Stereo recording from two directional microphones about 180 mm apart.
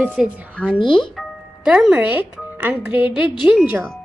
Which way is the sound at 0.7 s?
25° left (ahead or behind).